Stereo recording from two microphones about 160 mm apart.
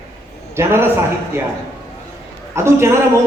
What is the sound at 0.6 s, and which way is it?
Speech, 15° right (ahead or behind).